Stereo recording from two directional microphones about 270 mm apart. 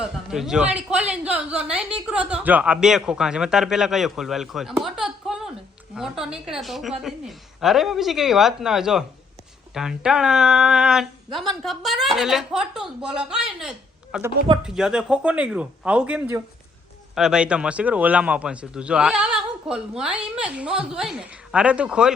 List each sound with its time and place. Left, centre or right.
0.0 s a woman's voice: centre